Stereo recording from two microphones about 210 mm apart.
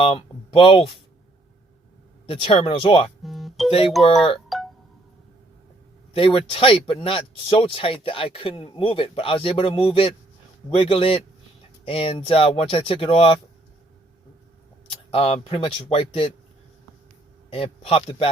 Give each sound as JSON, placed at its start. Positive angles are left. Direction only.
{"t": 0.0, "sound": "speech", "side_deg": 25}
{"t": 2.2, "sound": "speech", "side_deg": 25}
{"t": 3.2, "sound": "music", "side_deg": 0}
{"t": 3.8, "sound": "speech", "side_deg": 0}
{"t": 4.4, "sound": "music", "side_deg": 0}
{"t": 6.1, "sound": "speech", "side_deg": 25}
{"t": 15.1, "sound": "speech", "side_deg": 25}
{"t": 17.5, "sound": "speech", "side_deg": 25}